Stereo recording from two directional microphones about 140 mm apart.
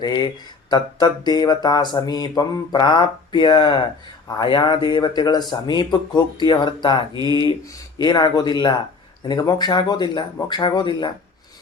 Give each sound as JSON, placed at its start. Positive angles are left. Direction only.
{"t": 0.0, "sound": "speech", "side_deg": 30}